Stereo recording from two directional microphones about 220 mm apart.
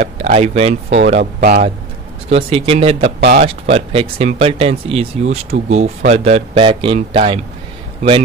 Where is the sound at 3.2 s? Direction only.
45° right (ahead or behind).